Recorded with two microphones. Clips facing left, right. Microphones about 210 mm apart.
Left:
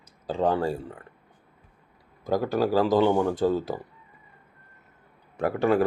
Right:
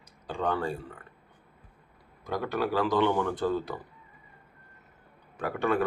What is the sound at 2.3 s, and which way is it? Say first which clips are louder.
A man's voice: left 6 dB; 35° left (ahead or behind).